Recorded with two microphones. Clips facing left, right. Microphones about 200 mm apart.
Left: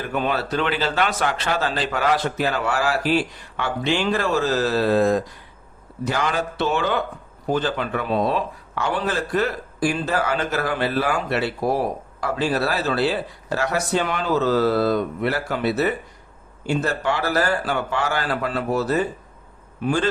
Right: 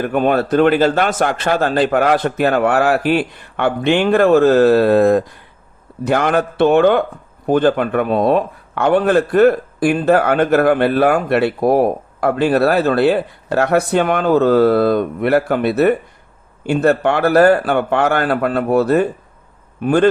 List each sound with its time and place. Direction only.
0.0 s speech: 55° right (ahead or behind)